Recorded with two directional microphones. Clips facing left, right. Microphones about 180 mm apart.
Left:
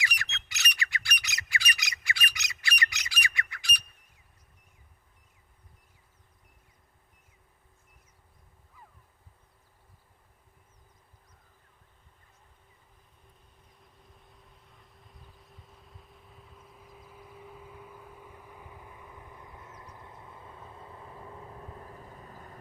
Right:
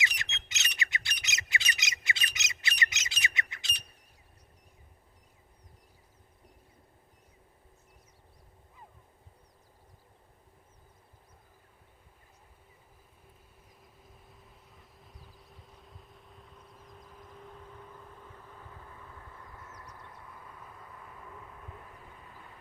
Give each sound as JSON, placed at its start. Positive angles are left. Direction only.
{"t": 0.0, "sound": "squawk", "side_deg": -20}
{"t": 13.8, "sound": "vehicle", "side_deg": -5}